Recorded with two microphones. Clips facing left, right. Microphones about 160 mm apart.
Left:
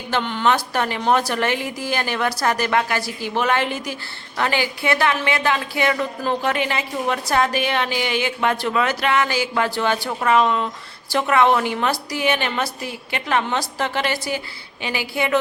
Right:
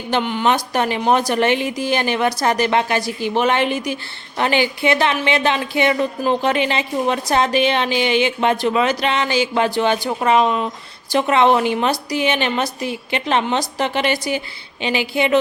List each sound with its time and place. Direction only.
0.1 s a woman's voice: 15° right (ahead or behind)